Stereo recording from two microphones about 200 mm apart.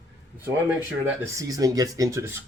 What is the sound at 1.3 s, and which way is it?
Speech, 15° right (ahead or behind).